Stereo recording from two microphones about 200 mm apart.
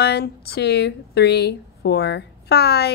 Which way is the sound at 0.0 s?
55° left (ahead or behind).